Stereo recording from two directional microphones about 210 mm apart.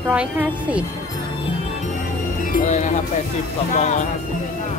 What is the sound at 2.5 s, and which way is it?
Speech, 40° left (ahead or behind).